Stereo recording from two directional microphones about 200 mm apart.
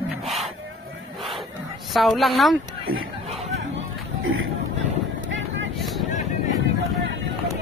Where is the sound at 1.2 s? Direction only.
Centre (ahead or behind).